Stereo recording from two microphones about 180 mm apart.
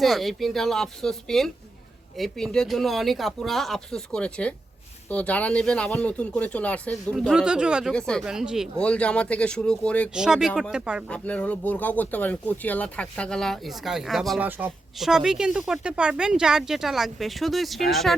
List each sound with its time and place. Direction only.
0.0 s speech: centre (ahead or behind)
11.1 s speech: 5° left (ahead or behind)